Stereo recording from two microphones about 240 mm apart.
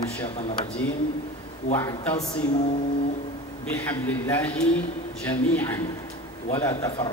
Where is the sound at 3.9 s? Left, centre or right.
Centre.